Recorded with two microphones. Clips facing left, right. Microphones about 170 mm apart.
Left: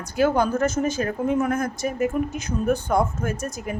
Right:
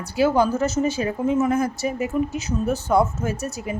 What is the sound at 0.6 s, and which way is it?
Speech, 50° left (ahead or behind).